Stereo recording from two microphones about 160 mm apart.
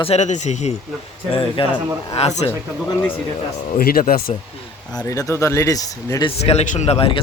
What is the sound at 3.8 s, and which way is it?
Speech, 65° left (ahead or behind).